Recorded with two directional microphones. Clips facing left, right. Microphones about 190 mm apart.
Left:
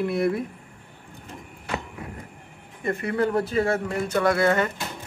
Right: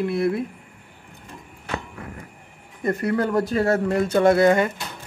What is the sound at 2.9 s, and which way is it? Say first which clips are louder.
Speech: right 2 dB; 40° right (ahead or behind).